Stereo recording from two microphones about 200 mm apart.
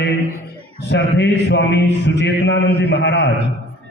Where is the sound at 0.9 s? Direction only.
60° left (ahead or behind).